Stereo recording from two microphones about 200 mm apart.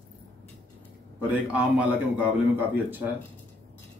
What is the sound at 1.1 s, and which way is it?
Speech, 5° right (ahead or behind).